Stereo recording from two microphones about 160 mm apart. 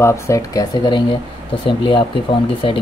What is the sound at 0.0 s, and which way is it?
Speech, 20° left (ahead or behind).